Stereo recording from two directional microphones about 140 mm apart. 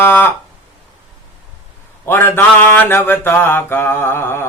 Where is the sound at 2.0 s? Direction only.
15° left (ahead or behind).